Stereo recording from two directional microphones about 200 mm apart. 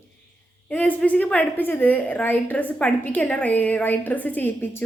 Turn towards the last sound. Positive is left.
turn(degrees=10)  # may be behind; listen again after turning